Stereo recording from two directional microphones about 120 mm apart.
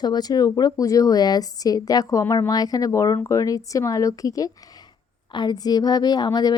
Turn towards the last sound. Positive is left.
turn(degrees=35)  # may be behind; listen again after turning